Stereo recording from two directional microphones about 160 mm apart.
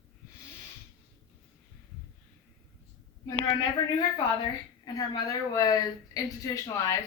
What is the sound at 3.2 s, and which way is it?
Speech, 25° left (ahead or behind).